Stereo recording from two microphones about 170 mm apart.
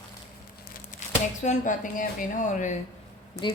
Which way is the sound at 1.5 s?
50° left (ahead or behind).